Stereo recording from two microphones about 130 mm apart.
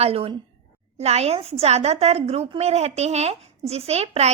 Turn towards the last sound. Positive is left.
turn(degrees=-55)  # may be behind; listen again after turning